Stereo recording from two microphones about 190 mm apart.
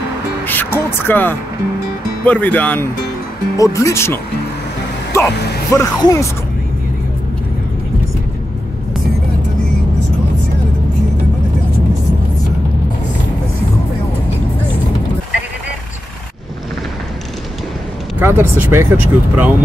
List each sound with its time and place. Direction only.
0.5 s speech: 10° left (ahead or behind)
18.2 s speech: 10° right (ahead or behind)